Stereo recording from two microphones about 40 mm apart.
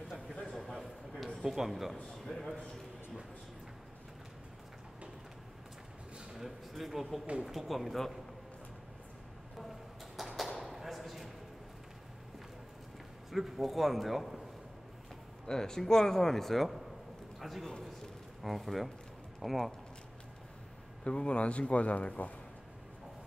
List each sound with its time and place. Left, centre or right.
0.6 s a sound: centre
1.4 s speech: centre
2.2 s a man's voice: centre
6.3 s a man's voice: centre
10.1 s a sound: centre
13.3 s a man's voice: centre
15.4 s a man's voice: centre
21.0 s speech: left